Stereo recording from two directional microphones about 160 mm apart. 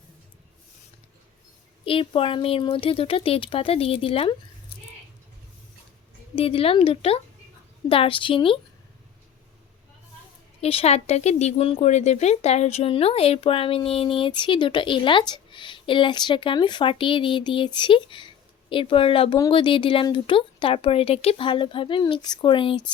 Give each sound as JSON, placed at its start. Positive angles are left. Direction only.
{"t": 1.8, "sound": "speech", "side_deg": 35}
{"t": 6.3, "sound": "speech", "side_deg": 35}
{"t": 10.6, "sound": "speech", "side_deg": 40}